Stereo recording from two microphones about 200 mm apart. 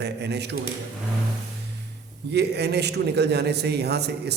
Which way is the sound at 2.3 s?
55° right (ahead or behind).